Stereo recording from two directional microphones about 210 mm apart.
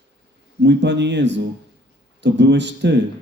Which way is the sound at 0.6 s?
55° right (ahead or behind).